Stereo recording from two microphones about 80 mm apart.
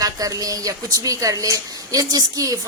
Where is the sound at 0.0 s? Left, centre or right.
Right.